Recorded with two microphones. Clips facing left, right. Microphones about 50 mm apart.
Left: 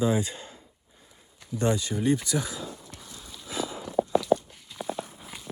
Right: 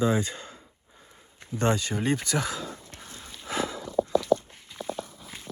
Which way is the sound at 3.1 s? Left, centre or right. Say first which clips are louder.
Right 5 dB; right.